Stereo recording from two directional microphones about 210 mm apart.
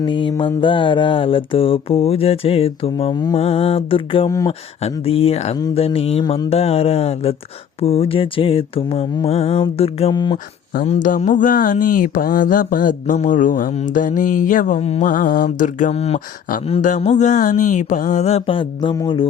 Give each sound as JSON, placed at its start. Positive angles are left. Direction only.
{"t": 0.0, "sound": "mantra", "side_deg": 25}
{"t": 4.8, "sound": "mantra", "side_deg": 30}
{"t": 10.3, "sound": "speech", "side_deg": 40}